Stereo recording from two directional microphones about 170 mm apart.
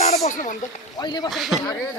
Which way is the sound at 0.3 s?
45° left (ahead or behind).